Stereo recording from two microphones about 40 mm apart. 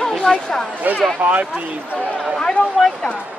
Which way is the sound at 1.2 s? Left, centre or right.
Right.